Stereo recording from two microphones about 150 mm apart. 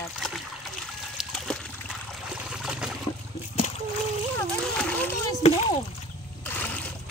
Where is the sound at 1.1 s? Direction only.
Centre (ahead or behind).